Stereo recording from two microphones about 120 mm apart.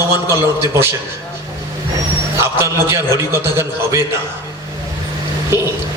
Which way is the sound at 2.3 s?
20° right (ahead or behind).